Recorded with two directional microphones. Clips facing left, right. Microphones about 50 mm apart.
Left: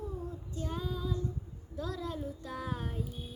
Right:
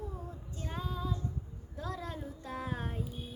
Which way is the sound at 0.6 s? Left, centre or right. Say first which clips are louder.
Left 1 dB; right.